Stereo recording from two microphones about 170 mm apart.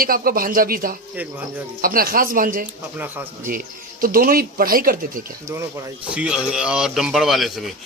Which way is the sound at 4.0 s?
60° right (ahead or behind).